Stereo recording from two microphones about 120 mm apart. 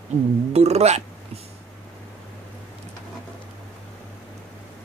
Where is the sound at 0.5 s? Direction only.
60° right (ahead or behind).